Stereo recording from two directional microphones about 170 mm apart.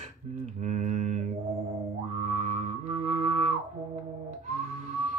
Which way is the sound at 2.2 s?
40° right (ahead or behind).